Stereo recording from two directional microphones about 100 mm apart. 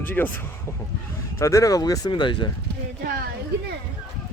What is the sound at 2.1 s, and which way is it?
Speech, 55° left (ahead or behind).